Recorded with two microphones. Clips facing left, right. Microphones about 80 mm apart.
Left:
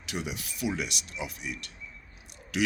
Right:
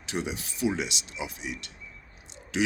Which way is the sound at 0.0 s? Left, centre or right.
Right.